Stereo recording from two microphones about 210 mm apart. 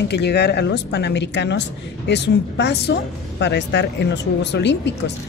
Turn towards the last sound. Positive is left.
turn(degrees=55)  # may be behind; listen again after turning